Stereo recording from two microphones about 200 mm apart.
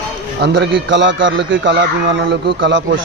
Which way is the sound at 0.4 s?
60° right (ahead or behind).